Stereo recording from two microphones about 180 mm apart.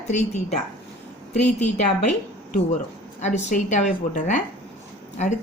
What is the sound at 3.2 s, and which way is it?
Speech, 40° left (ahead or behind).